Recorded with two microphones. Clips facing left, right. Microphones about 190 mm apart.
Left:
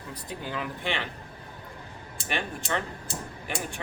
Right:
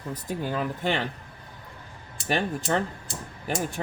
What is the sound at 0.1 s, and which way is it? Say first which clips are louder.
Speech: right 6 dB; 45° right (ahead or behind).